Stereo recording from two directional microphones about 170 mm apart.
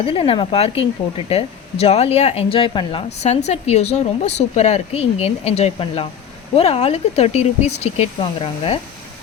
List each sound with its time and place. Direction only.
0.0 s speech: 35° left (ahead or behind)